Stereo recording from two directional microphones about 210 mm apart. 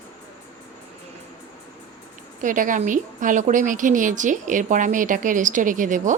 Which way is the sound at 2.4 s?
40° right (ahead or behind).